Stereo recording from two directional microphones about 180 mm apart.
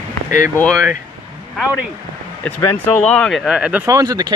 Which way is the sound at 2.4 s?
15° left (ahead or behind).